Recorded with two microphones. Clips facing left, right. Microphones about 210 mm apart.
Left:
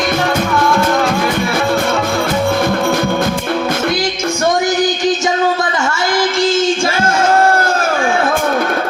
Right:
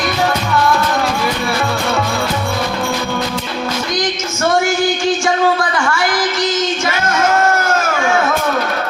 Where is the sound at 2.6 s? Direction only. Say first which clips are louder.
Left 5 dB; 50° left (ahead or behind).